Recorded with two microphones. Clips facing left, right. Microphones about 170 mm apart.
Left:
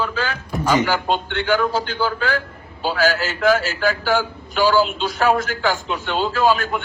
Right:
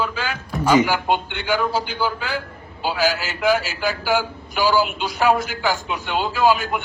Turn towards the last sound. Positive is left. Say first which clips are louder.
# even
turn(degrees=-15)  # may be behind; listen again after turning